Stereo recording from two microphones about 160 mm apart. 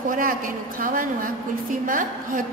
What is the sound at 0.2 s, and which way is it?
A woman's voice, 60° right (ahead or behind).